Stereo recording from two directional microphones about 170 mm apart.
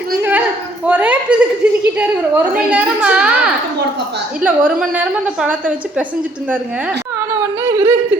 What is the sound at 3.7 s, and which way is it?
Speech, 85° right.